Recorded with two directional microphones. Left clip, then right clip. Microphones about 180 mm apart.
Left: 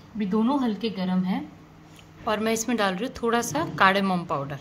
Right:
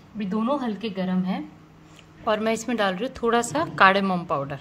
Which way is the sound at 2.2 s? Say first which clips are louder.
Right 2 dB; 15° right (ahead or behind).